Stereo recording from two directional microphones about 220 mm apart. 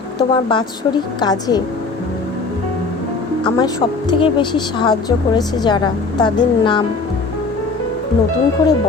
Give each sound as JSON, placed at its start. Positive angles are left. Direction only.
{"t": 0.2, "sound": "a woman's voice", "side_deg": 20}
{"t": 3.6, "sound": "a woman's voice", "side_deg": 20}